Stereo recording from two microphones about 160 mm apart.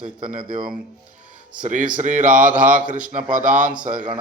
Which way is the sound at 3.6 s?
55° right (ahead or behind).